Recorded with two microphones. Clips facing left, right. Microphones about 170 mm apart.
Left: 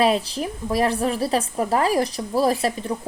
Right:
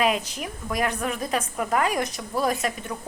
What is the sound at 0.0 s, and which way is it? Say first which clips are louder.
Speech: left 4 dB; 35° left (ahead or behind).